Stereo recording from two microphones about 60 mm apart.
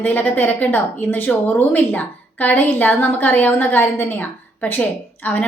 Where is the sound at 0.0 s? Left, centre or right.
Left.